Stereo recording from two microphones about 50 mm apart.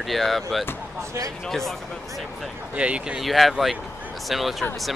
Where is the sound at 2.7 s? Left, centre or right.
Right.